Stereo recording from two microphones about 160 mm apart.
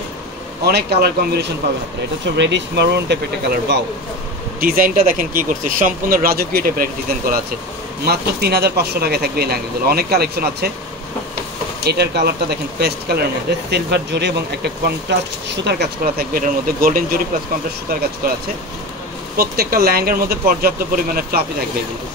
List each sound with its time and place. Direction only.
0.7 s speech: 90° right
4.6 s speech: 65° right (ahead or behind)
8.0 s speech: 80° right
11.8 s speech: 90° right
16.0 s speech: 65° right (ahead or behind)
18.2 s speech: 65° right (ahead or behind)